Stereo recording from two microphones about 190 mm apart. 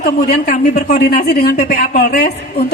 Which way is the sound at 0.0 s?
45° left (ahead or behind).